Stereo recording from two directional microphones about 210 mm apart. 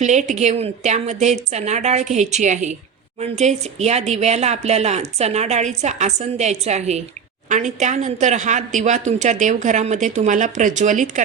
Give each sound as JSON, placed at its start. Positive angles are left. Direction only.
{"t": 0.0, "sound": "a woman's voice", "side_deg": -35}